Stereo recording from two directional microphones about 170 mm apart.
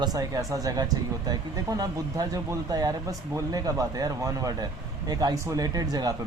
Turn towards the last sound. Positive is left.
turn(degrees=-20)  # may be behind; listen again after turning